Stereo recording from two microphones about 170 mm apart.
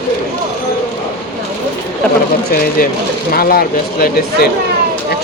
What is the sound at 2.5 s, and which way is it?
Speech, 60° left (ahead or behind).